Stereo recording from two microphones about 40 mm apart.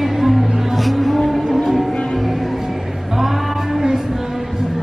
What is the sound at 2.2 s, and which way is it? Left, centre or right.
Music, centre.